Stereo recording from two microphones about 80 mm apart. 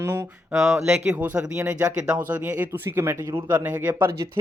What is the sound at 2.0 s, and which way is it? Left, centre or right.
Speech, centre.